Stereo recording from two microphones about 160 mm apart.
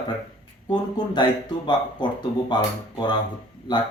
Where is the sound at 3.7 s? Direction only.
30° left (ahead or behind).